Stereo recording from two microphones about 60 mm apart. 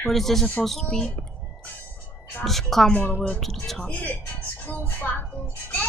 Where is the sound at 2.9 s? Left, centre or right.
Left.